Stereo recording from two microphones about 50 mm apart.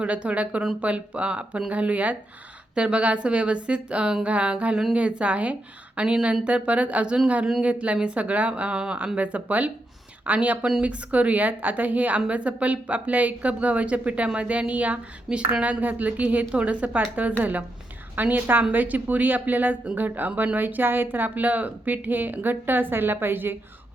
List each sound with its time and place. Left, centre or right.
0.0 s speech: right
8.7 s speech: centre
9.1 s speech: right